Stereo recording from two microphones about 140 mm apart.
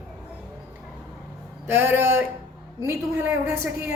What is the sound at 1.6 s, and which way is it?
Speech, 15° right (ahead or behind).